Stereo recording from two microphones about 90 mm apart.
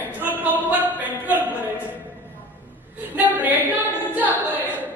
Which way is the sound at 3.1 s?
20° right (ahead or behind).